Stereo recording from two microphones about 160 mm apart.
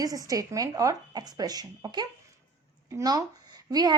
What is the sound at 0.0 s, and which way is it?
A woman's voice, 20° right (ahead or behind).